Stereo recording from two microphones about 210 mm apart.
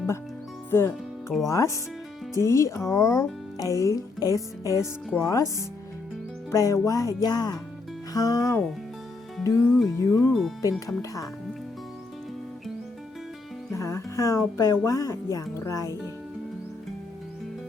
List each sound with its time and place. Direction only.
0.7 s speech: 10° left (ahead or behind)
13.7 s speech: 15° left (ahead or behind)